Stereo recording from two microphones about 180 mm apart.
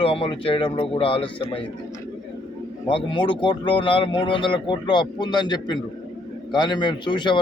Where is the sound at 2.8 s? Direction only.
25° left (ahead or behind).